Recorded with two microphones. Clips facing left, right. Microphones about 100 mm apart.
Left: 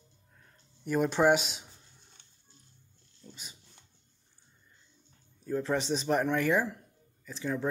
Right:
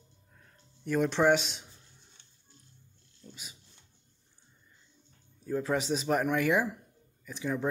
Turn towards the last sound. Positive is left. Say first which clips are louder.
# right 1 dB
turn(degrees=-10)  # may be behind; listen again after turning